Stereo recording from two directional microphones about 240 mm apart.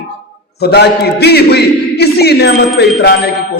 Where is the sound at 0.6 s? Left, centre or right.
Left.